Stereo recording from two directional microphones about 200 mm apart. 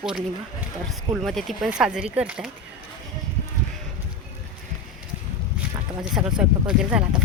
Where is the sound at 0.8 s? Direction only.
Centre (ahead or behind).